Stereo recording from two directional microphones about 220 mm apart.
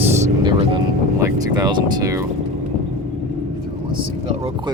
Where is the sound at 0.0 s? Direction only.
15° right (ahead or behind).